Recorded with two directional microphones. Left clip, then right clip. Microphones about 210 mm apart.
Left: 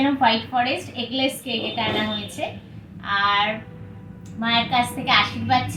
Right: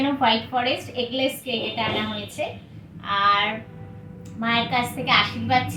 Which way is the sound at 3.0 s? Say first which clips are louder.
Even; 5° right (ahead or behind).